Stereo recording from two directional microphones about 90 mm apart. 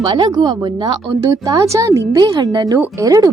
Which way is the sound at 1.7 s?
35° right (ahead or behind).